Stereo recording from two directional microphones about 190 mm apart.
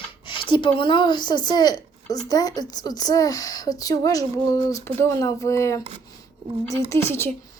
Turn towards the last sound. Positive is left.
turn(degrees=15)  # may be behind; listen again after turning